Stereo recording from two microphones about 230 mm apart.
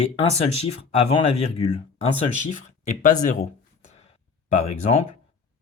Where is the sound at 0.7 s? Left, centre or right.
Left.